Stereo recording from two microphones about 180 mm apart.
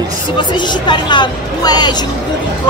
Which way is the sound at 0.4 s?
25° left (ahead or behind).